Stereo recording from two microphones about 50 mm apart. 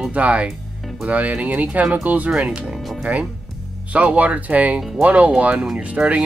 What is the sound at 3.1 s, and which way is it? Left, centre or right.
Speech, right.